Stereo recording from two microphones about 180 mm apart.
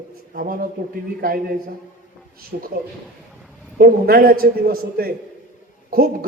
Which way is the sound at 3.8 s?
55° right (ahead or behind).